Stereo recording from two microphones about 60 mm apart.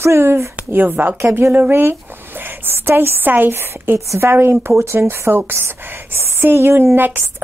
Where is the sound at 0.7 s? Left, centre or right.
Right.